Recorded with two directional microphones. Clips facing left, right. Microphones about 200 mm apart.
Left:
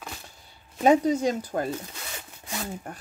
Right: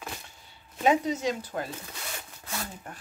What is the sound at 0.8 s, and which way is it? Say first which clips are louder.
Speech: left 5 dB; 40° left (ahead or behind).